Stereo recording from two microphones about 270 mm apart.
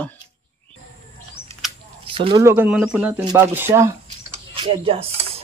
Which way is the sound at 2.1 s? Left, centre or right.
Centre.